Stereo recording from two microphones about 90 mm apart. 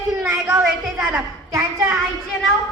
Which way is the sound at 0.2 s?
30° right (ahead or behind).